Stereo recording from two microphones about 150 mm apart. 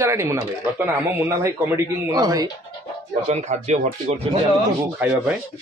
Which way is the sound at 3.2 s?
50° right (ahead or behind).